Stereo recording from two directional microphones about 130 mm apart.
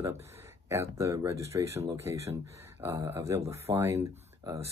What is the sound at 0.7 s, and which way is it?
Speech, 20° right (ahead or behind).